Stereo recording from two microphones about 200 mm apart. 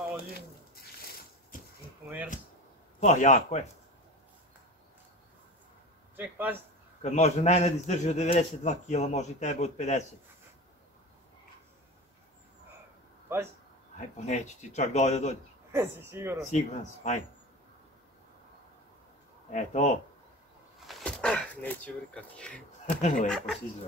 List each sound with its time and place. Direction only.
0.2 s a sound: 50° left (ahead or behind)
3.0 s a man's voice: 35° left (ahead or behind)
6.1 s speech: 10° right (ahead or behind)
7.0 s a man's voice: 35° left (ahead or behind)
13.9 s a man's voice: 35° left (ahead or behind)
15.7 s speech: 10° right (ahead or behind)
16.4 s a man's voice: 35° left (ahead or behind)
19.5 s a man's voice: 35° left (ahead or behind)
20.8 s speech: 5° left (ahead or behind)
22.8 s speech: 40° left (ahead or behind)
23.2 s speech: 5° left (ahead or behind)